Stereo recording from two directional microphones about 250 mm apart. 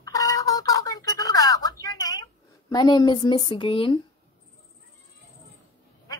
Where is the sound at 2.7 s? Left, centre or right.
Centre.